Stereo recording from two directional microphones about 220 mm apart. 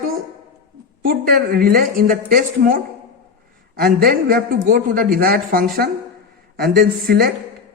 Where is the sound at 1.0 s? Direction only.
45° right (ahead or behind).